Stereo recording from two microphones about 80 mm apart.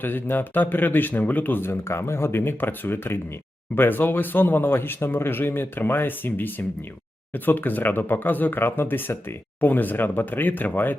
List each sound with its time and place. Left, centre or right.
0.0 s speech: left